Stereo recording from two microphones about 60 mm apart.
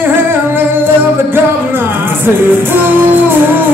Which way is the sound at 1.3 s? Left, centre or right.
Right.